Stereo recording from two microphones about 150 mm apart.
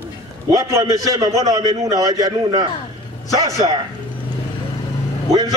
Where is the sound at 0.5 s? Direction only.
20° right (ahead or behind).